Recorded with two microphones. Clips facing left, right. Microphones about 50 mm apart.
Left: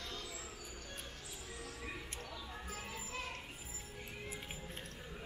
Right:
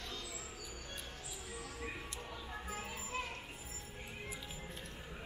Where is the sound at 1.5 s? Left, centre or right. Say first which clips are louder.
Right 2 dB; centre.